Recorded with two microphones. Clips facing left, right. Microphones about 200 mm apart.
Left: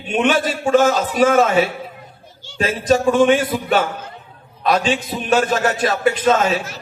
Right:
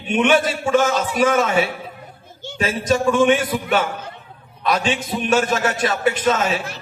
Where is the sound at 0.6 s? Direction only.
35° left (ahead or behind).